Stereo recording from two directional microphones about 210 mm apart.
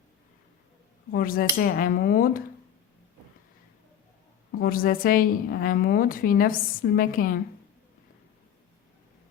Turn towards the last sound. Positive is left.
turn(degrees=40)  # may be behind; listen again after turning